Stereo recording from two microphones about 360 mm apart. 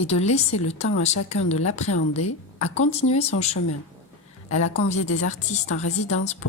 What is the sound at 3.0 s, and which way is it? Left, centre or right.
Speech, centre.